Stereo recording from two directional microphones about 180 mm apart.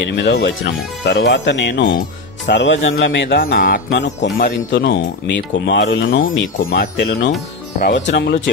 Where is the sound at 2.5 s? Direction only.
85° left.